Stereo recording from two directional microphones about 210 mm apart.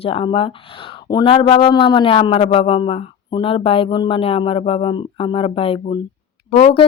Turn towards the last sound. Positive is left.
turn(degrees=25)  # may be behind; listen again after turning